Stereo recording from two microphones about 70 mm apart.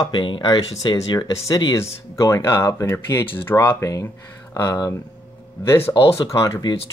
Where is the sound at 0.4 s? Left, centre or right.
Left.